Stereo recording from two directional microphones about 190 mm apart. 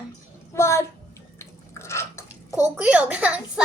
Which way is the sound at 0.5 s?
15° left (ahead or behind).